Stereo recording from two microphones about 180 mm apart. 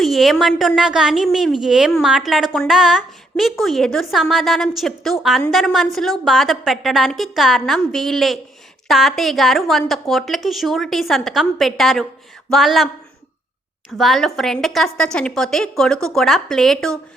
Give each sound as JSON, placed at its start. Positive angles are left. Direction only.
{"t": 0.0, "sound": "a woman's voice", "side_deg": 0}
{"t": 14.0, "sound": "a woman's voice", "side_deg": 0}